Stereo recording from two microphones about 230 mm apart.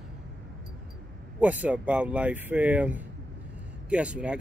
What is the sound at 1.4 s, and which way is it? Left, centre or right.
Speech, centre.